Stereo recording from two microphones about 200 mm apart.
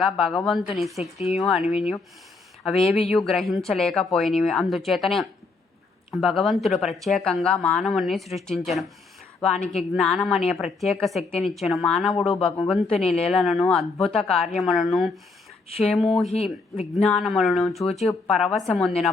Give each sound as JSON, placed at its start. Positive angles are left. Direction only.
{"t": 0.0, "sound": "a woman's voice", "side_deg": 0}
{"t": 3.1, "sound": "a woman's voice", "side_deg": 0}
{"t": 11.2, "sound": "speech", "side_deg": 30}
{"t": 11.4, "sound": "a woman's voice", "side_deg": 0}
{"t": 16.3, "sound": "speech", "side_deg": 30}
{"t": 16.9, "sound": "a woman's voice", "side_deg": 0}